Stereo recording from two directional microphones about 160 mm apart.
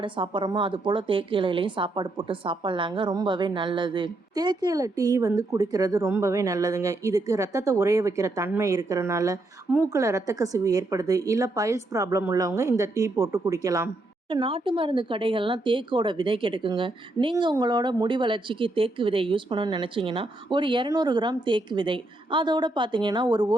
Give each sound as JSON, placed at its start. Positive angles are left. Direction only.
{"t": 0.0, "sound": "a woman's voice", "side_deg": -30}
{"t": 14.3, "sound": "speech", "side_deg": -30}